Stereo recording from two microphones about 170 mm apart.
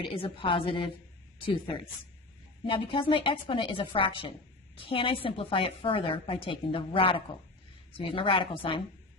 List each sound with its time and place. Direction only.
0.0 s a woman's voice: 30° left (ahead or behind)